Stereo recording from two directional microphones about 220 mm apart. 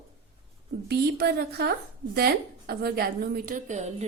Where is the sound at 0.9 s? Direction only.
45° right (ahead or behind).